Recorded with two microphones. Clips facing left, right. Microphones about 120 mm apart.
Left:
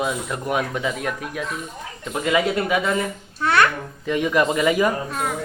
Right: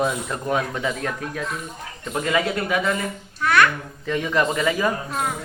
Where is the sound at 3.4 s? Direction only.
30° left (ahead or behind).